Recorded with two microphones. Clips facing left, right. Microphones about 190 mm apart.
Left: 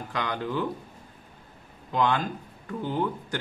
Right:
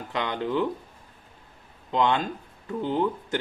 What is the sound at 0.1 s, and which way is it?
Speech, 20° right (ahead or behind).